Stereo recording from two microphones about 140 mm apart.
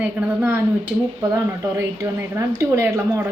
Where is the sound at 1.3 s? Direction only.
20° right (ahead or behind).